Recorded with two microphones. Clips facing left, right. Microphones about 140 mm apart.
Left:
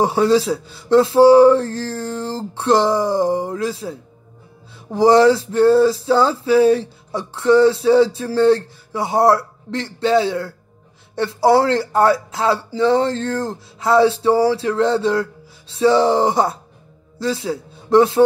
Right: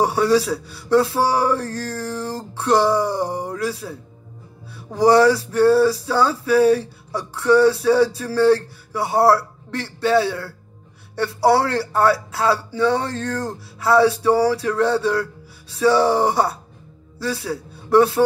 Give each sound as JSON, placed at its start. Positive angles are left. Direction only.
{"t": 0.0, "sound": "male singing", "side_deg": 20}
{"t": 4.9, "sound": "male singing", "side_deg": 20}
{"t": 17.2, "sound": "a man's voice", "side_deg": 20}